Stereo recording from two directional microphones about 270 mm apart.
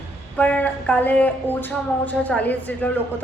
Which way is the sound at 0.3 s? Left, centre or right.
Centre.